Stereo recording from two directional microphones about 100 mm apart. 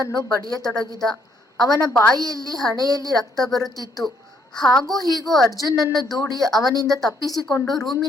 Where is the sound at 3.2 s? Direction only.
5° left (ahead or behind).